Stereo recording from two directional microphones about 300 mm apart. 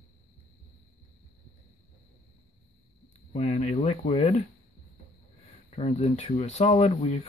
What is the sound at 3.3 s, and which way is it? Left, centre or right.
Speech, centre.